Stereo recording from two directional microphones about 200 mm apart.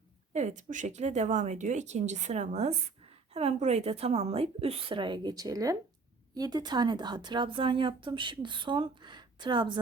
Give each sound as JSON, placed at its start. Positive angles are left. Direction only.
{"t": 0.3, "sound": "a woman's voice", "side_deg": -35}